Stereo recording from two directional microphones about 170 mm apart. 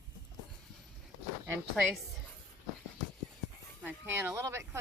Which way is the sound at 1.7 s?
Centre (ahead or behind).